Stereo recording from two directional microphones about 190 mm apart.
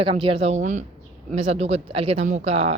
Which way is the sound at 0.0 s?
30° right (ahead or behind).